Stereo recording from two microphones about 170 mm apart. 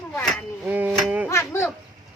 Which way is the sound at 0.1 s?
10° left (ahead or behind).